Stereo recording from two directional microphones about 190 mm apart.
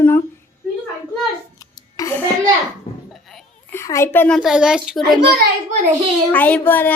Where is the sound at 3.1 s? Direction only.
Centre (ahead or behind).